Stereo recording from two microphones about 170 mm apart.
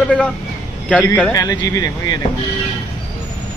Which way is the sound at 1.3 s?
25° left (ahead or behind).